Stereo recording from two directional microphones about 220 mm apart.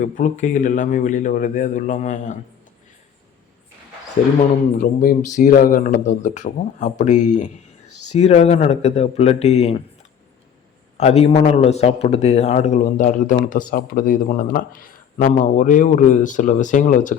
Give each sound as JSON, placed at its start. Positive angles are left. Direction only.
{"t": 0.0, "sound": "a man's voice", "side_deg": 35}
{"t": 4.8, "sound": "a man's voice", "side_deg": 40}
{"t": 10.9, "sound": "a man's voice", "side_deg": 30}